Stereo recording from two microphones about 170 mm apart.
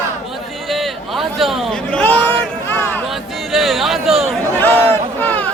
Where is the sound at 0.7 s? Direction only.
Centre (ahead or behind).